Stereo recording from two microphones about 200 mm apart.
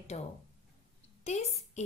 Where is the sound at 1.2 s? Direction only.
35° left (ahead or behind).